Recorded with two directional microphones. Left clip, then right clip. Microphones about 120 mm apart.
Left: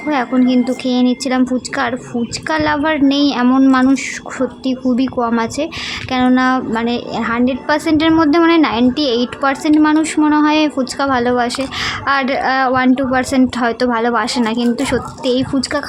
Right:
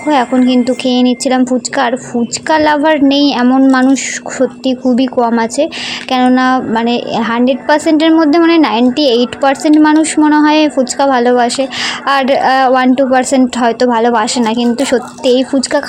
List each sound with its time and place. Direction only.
0.0 s a woman's voice: 25° right (ahead or behind)